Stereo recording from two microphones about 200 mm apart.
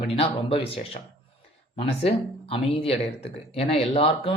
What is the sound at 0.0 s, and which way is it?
A woman's voice, 30° left (ahead or behind).